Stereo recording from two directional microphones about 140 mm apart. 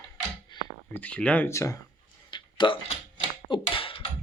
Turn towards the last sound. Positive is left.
turn(degrees=40)  # may be behind; listen again after turning